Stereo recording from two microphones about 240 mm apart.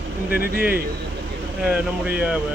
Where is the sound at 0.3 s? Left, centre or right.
Left.